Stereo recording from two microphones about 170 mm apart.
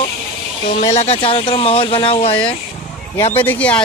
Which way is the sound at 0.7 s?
40° left (ahead or behind).